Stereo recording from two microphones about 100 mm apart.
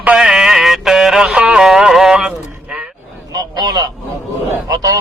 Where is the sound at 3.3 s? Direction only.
40° right (ahead or behind).